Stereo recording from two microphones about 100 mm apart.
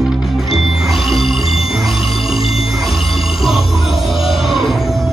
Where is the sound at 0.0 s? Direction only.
Centre (ahead or behind).